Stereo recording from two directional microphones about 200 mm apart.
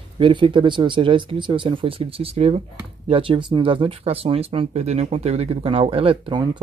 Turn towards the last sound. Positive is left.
turn(degrees=-25)  # may be behind; listen again after turning